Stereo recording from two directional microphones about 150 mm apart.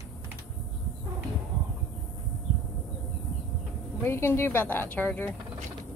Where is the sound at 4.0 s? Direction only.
15° left (ahead or behind).